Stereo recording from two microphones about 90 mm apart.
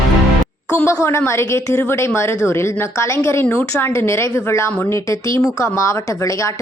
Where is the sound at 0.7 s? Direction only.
25° left (ahead or behind).